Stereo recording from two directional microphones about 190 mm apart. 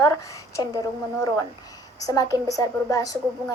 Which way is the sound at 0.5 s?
15° left (ahead or behind).